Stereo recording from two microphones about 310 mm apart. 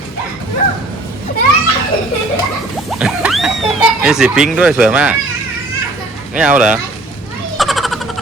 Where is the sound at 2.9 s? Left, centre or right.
Centre.